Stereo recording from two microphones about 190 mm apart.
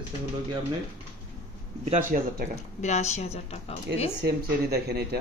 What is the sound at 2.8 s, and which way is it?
Speech, 35° left (ahead or behind).